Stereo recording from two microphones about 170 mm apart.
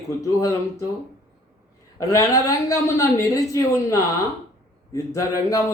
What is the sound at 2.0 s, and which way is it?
A man's voice, 20° left (ahead or behind).